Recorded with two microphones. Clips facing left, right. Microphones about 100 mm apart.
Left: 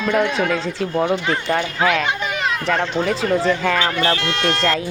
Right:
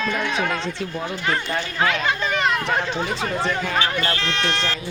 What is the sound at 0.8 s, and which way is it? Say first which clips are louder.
Speech: left 9 dB; 55° left (ahead or behind).